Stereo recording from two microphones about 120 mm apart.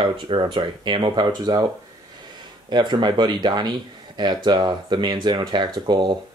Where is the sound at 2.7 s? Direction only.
40° right (ahead or behind).